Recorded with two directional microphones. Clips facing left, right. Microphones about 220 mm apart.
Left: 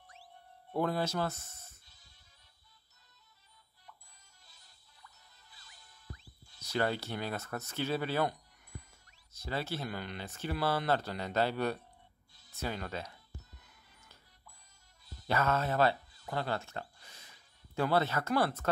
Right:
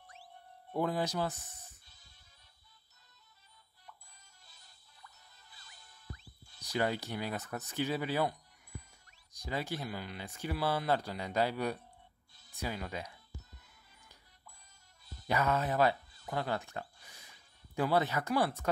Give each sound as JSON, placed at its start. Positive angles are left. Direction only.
{"t": 0.7, "sound": "speech", "side_deg": -15}
{"t": 6.6, "sound": "speech", "side_deg": -15}
{"t": 15.2, "sound": "speech", "side_deg": -15}
{"t": 16.3, "sound": "a sound", "side_deg": -15}
{"t": 17.7, "sound": "speech", "side_deg": -15}